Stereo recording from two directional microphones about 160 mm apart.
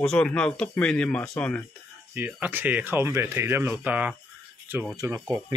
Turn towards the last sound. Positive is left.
turn(degrees=-20)  # may be behind; listen again after turning